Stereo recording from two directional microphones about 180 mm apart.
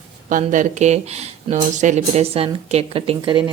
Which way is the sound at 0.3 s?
45° right (ahead or behind).